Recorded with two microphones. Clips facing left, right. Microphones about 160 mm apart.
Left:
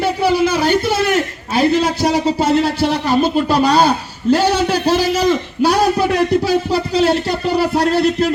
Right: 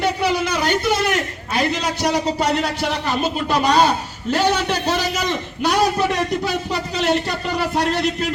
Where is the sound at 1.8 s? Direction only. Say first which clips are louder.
Left 5 dB; 30° left (ahead or behind).